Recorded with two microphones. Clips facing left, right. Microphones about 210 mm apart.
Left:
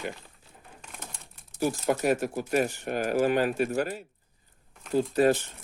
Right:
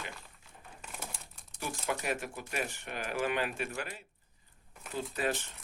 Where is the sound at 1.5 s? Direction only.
40° left (ahead or behind).